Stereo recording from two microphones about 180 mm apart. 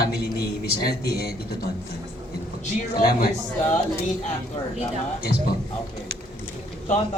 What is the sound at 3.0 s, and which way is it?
Speech, 55° left (ahead or behind).